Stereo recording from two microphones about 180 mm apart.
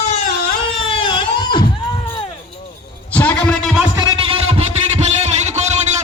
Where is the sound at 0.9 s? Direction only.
25° left (ahead or behind).